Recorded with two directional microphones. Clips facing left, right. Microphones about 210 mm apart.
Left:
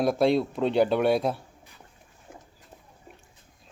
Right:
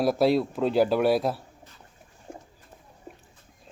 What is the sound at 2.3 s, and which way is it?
Bird, 30° right (ahead or behind).